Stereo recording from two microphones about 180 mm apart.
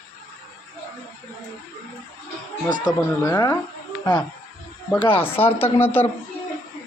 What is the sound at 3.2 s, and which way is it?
Speech, 10° left (ahead or behind).